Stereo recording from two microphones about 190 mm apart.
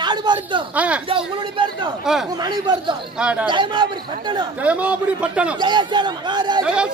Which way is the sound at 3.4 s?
25° right (ahead or behind).